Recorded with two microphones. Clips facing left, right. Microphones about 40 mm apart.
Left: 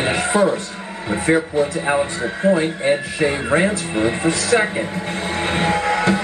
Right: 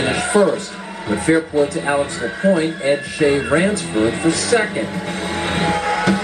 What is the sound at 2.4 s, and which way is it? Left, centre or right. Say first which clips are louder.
Speech: right 1 dB; centre.